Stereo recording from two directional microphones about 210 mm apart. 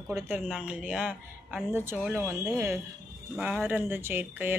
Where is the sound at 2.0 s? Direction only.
10° right (ahead or behind).